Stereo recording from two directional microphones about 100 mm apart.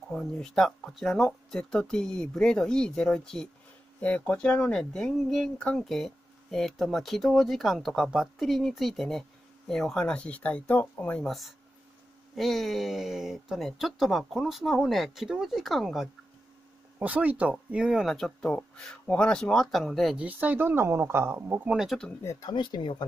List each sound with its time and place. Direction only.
0.1 s speech: 5° left (ahead or behind)
11.2 s speech: centre (ahead or behind)
17.0 s speech: 15° right (ahead or behind)
20.2 s speech: 15° right (ahead or behind)
21.7 s speech: centre (ahead or behind)
22.4 s speech: 50° left (ahead or behind)